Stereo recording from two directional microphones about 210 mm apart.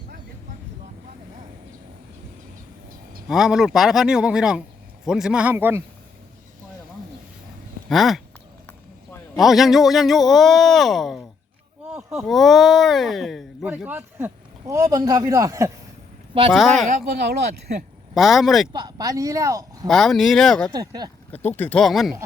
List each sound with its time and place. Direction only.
3.2 s speech: centre (ahead or behind)
7.9 s speech: centre (ahead or behind)
9.4 s speech: centre (ahead or behind)
12.3 s speech: centre (ahead or behind); by 15.7 s 15° right (ahead or behind)
16.5 s speech: centre (ahead or behind)
16.9 s speech: 50° right (ahead or behind)
18.1 s speech: centre (ahead or behind)
18.7 s speech: 20° right (ahead or behind)
19.9 s speech: centre (ahead or behind)
20.7 s speech: 20° right (ahead or behind)
21.4 s speech: 10° left (ahead or behind)